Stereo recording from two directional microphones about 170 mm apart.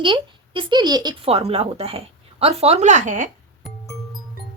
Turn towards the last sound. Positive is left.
turn(degrees=0)  # may be behind; listen again after turning